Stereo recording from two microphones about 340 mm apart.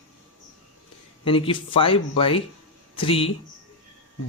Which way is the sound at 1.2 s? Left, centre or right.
Centre.